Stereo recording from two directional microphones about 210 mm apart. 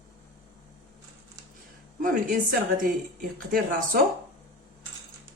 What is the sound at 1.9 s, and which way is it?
Speech, 40° right (ahead or behind).